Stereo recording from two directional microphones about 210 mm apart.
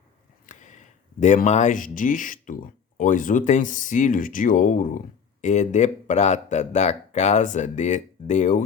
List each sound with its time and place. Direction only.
0.4 s speech: 35° left (ahead or behind)